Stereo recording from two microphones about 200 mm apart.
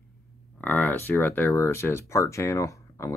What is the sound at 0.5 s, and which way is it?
Speech, 10° left (ahead or behind).